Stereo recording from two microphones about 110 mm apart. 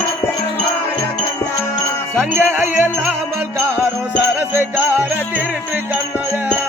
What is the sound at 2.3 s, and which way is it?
Music, 20° right (ahead or behind).